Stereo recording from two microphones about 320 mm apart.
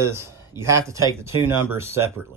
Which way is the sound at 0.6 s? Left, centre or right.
Centre.